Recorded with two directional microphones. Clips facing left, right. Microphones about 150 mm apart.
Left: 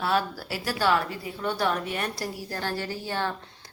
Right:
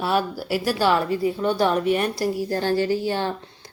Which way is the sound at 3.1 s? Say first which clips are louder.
Right 5 dB; 25° right (ahead or behind).